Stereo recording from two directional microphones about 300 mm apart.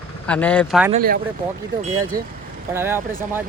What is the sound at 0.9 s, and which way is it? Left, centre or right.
Speech, right.